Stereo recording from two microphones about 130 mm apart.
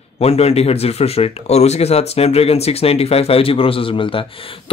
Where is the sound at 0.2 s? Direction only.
50° left (ahead or behind).